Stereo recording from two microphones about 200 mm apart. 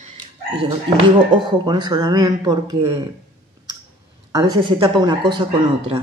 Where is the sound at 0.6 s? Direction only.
25° right (ahead or behind).